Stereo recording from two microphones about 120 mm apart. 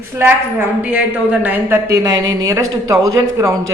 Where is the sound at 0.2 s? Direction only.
20° right (ahead or behind).